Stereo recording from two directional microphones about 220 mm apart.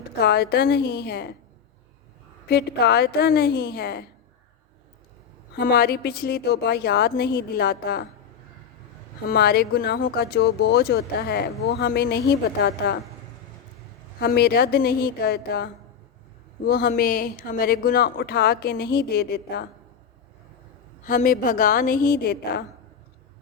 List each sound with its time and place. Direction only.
0.2 s speech: 45° left (ahead or behind)
2.5 s speech: 50° left (ahead or behind)
5.5 s speech: 45° left (ahead or behind)
9.3 s speech: 45° left (ahead or behind)
14.2 s speech: 45° left (ahead or behind)
21.0 s a woman's voice: 35° left (ahead or behind)